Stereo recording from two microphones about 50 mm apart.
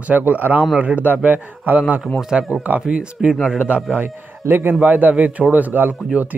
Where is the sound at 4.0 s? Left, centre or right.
Right.